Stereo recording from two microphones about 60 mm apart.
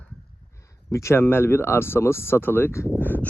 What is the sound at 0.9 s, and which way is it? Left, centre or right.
Speech, left.